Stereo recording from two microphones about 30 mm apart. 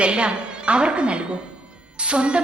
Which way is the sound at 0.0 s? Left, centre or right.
Right.